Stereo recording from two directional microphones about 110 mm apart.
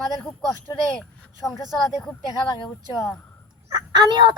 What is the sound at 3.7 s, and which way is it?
Speech, 40° right (ahead or behind).